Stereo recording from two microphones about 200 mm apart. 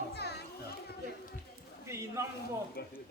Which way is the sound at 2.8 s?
50° left (ahead or behind).